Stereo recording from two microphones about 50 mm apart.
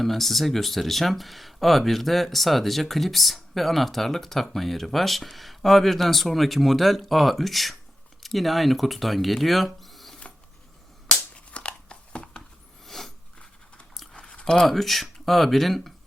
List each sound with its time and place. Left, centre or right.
0.0 s speech: centre
11.3 s chewing: left
12.8 s a sound: centre
13.9 s chewing: centre
14.2 s chewing: left
14.7 s speech: centre